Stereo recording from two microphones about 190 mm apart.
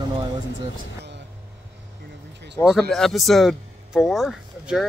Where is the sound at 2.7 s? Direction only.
Centre (ahead or behind).